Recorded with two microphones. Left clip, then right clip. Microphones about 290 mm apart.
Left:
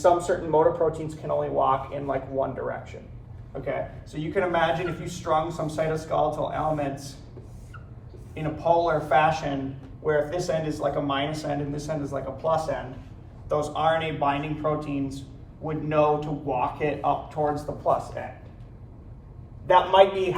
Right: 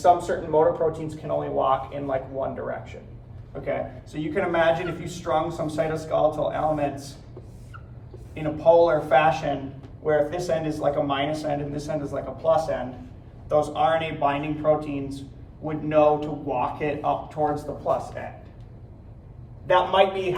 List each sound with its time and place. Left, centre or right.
0.0 s a man's voice: centre
8.4 s a man's voice: centre
19.6 s a man's voice: centre